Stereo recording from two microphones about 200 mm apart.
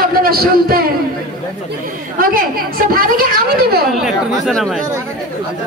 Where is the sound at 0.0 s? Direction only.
50° right (ahead or behind).